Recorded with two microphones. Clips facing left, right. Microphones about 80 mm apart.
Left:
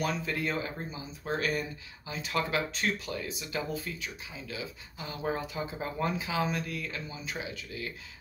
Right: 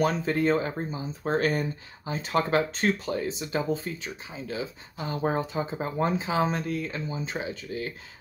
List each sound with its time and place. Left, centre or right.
0.0 s speech: right